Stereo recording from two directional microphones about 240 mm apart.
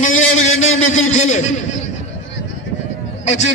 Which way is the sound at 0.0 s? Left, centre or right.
Left.